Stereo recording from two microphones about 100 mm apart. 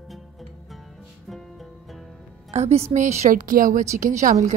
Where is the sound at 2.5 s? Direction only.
90° right.